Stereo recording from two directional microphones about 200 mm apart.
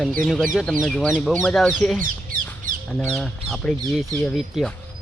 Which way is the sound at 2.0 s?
45° right (ahead or behind).